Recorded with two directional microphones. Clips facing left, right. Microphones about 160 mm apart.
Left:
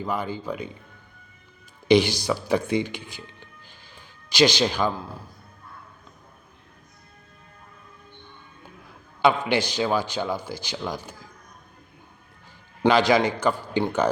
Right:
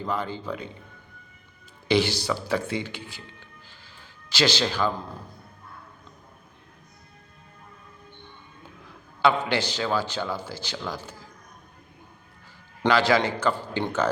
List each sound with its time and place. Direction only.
0.0 s a man's voice: 10° left (ahead or behind)
1.9 s a man's voice: 15° left (ahead or behind)
9.2 s a man's voice: 15° left (ahead or behind)
12.9 s a man's voice: 15° left (ahead or behind)